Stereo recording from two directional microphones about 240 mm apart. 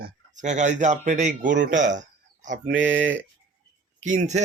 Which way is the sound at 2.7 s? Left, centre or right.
Right.